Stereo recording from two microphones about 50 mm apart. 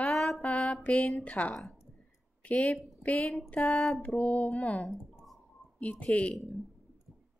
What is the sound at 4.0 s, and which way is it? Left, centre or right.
Speech, left.